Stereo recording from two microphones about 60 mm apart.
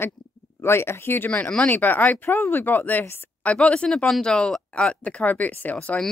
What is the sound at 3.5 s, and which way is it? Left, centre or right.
Speech, centre.